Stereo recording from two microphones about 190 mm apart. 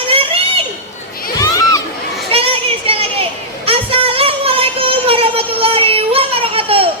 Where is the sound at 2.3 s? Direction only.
30° right (ahead or behind).